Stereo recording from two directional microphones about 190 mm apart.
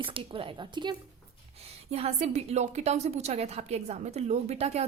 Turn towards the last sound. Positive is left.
turn(degrees=-35)  # may be behind; listen again after turning